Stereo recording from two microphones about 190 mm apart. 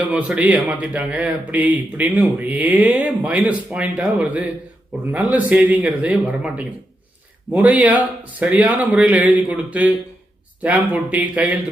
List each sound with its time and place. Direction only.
0.1 s a man's voice: 5° right (ahead or behind)